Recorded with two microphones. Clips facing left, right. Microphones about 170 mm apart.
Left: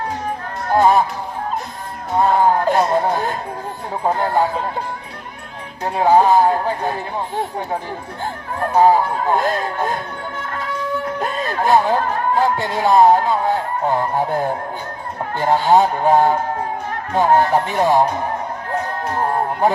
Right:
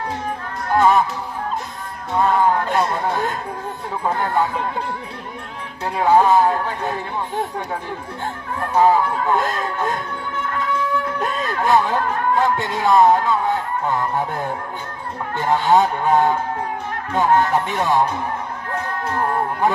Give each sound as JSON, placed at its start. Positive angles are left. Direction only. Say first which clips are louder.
{"t": 0.7, "sound": "speech", "louder": "left 1 dB", "side_deg": 30}
{"t": 2.1, "sound": "speech", "louder": "left 2 dB", "side_deg": 35}
{"t": 4.2, "sound": "speech", "louder": "left 2 dB", "side_deg": 30}
{"t": 5.8, "sound": "speech", "louder": "left 2 dB", "side_deg": 30}
{"t": 8.7, "sound": "speech", "louder": "left 2 dB", "side_deg": 30}
{"t": 11.2, "sound": "speech", "louder": "left 1 dB", "side_deg": 35}
{"t": 15.4, "sound": "speech", "louder": "left 2 dB", "side_deg": 35}
{"t": 18.7, "sound": "music", "louder": "left 2 dB", "side_deg": 30}